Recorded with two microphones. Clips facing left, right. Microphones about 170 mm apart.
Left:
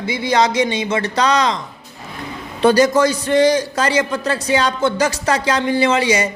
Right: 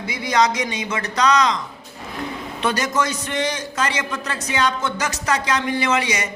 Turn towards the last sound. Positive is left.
turn(degrees=30)  # may be behind; listen again after turning